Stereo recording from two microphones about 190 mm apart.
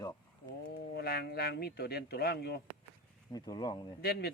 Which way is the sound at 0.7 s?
55° left (ahead or behind).